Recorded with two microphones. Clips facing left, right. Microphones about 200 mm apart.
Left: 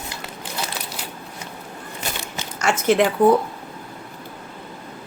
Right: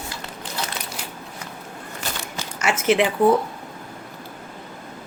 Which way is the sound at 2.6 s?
5° right (ahead or behind).